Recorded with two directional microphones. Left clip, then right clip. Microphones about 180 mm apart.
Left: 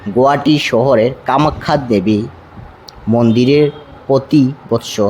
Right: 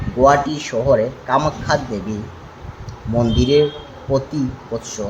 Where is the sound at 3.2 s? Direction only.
45° left (ahead or behind).